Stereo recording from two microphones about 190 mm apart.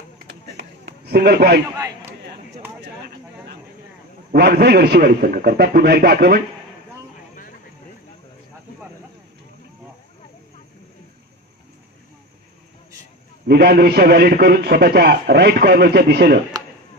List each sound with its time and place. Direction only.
0.8 s speech: 55° right (ahead or behind)
1.8 s a sound: 20° right (ahead or behind)
4.3 s a man's voice: 55° right (ahead or behind)
13.5 s a man's voice: 55° right (ahead or behind)